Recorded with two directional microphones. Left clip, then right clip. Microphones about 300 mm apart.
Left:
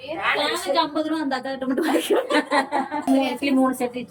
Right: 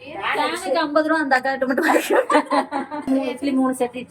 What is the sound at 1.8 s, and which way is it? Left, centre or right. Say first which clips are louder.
Speech: right 3 dB; centre.